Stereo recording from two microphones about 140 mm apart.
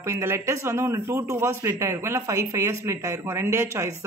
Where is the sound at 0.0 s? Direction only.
20° right (ahead or behind).